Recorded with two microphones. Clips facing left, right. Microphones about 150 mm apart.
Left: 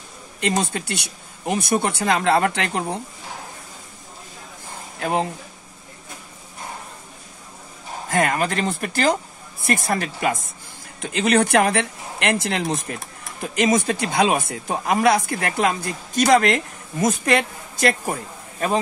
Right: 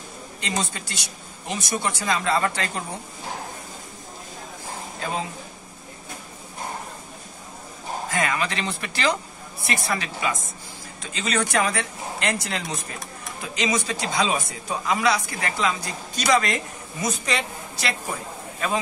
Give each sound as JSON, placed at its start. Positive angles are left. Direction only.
{"t": 0.4, "sound": "speech", "side_deg": 55}
{"t": 5.0, "sound": "speech", "side_deg": 60}
{"t": 8.1, "sound": "speech", "side_deg": 50}